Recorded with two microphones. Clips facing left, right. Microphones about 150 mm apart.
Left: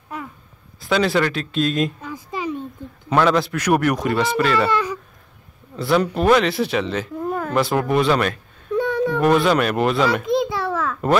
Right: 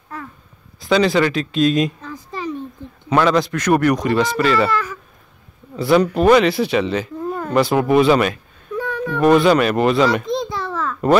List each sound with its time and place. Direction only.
0.7 s speech: 5° left (ahead or behind)
2.1 s a sound: 15° left (ahead or behind)
3.1 s speech: centre (ahead or behind)
5.8 s a child's voice: centre (ahead or behind)